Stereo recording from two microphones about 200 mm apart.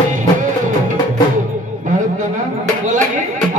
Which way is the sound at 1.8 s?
40° right (ahead or behind).